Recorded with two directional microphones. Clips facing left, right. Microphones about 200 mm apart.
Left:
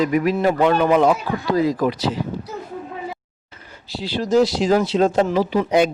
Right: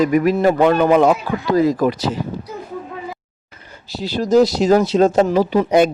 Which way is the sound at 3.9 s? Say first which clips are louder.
Right 3 dB; 45° right (ahead or behind).